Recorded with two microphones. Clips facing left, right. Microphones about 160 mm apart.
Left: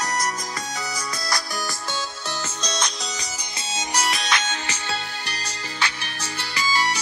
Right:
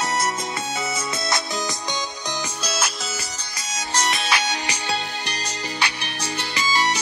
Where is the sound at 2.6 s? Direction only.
5° right (ahead or behind).